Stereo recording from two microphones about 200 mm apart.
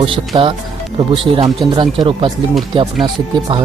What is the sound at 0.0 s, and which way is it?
Speech, 25° right (ahead or behind).